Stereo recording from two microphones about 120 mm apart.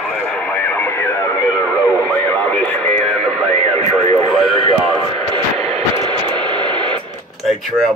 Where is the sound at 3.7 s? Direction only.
55° right (ahead or behind).